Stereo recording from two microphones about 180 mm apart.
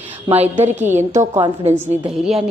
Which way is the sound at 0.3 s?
35° right (ahead or behind).